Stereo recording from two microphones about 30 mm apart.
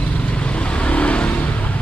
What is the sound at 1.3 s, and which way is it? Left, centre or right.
Vehicle, left.